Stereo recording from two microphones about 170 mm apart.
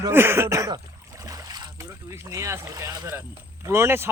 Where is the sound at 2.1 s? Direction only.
15° right (ahead or behind).